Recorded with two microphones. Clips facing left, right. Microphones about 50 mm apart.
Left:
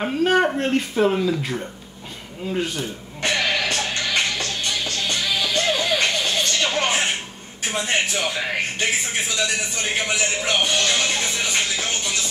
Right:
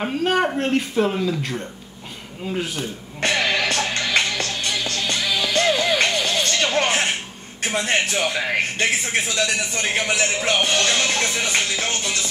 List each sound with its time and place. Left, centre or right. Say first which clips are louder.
0.0 s speech: left 2 dB; centre
2.4 s speech: left 1 dB; centre
3.2 s music: right 1 dB; right
7.6 s speech: right 1 dB; right
11.3 s speech: right 2 dB; right